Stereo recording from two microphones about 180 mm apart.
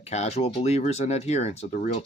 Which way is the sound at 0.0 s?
40° left (ahead or behind).